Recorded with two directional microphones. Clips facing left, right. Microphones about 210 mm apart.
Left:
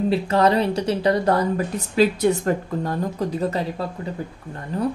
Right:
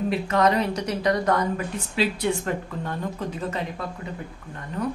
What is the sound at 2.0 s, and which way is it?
Speech, 45° left (ahead or behind).